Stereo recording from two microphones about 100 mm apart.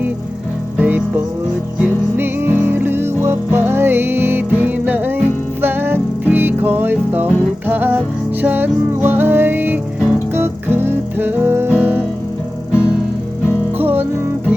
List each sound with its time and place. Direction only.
0.8 s music: 15° right (ahead or behind)
13.7 s music: 20° right (ahead or behind)